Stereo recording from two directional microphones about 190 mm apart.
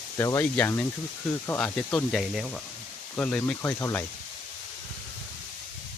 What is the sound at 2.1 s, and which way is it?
Speech, centre (ahead or behind).